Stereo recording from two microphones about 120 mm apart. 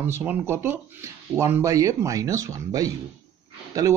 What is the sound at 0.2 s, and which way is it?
Speech, 15° right (ahead or behind).